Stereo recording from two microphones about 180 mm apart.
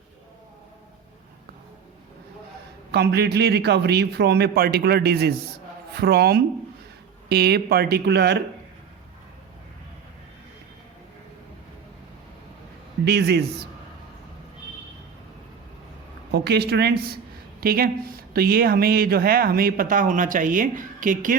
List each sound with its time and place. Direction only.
2.9 s a man's voice: 65° right (ahead or behind)
13.1 s a man's voice: 65° right (ahead or behind)
16.3 s a man's voice: 65° right (ahead or behind); by 21.3 s 45° right (ahead or behind)